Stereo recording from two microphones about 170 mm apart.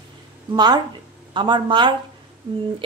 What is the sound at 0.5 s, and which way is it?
A woman's voice, 25° right (ahead or behind).